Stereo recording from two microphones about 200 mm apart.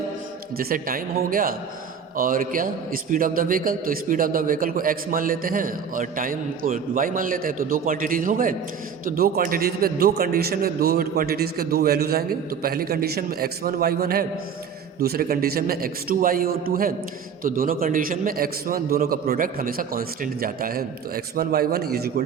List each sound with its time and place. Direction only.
0.5 s a man's voice: 50° right (ahead or behind)